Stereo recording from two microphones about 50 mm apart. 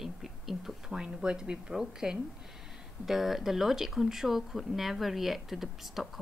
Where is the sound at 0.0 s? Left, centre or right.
Centre.